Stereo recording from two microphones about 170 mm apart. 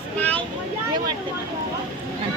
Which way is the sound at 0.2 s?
10° left (ahead or behind).